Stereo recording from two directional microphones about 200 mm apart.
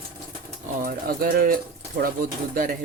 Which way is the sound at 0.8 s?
45° right (ahead or behind).